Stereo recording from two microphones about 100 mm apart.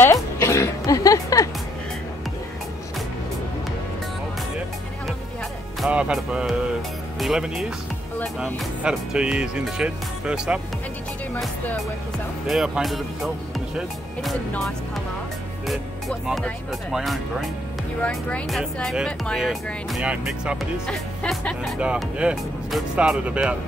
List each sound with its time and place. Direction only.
0.0 s music: 30° left (ahead or behind)
5.9 s music: 10° right (ahead or behind)
6.1 s speech: centre (ahead or behind)
8.8 s speech: 10° right (ahead or behind)
12.4 s speech: 5° right (ahead or behind)
15.6 s music: centre (ahead or behind)
16.9 s speech: centre (ahead or behind)
18.5 s speech: centre (ahead or behind)
20.8 s speech: 5° left (ahead or behind)
21.7 s speech: 10° right (ahead or behind)